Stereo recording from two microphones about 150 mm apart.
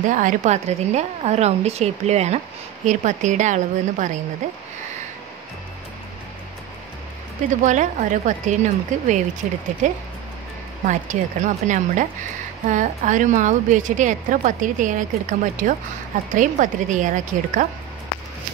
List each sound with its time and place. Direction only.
0.1 s a woman's voice: 60° right (ahead or behind)
7.4 s a woman's voice: 55° right (ahead or behind)